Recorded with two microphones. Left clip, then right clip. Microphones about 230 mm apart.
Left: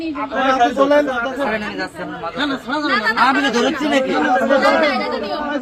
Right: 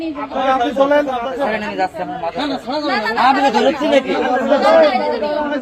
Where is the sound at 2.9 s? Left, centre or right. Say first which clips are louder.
Right 1 dB; centre.